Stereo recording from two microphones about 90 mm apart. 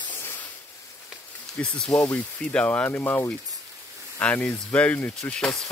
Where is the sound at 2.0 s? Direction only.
10° left (ahead or behind).